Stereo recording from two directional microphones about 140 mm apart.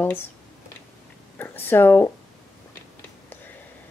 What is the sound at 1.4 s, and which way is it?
Speech, 15° left (ahead or behind).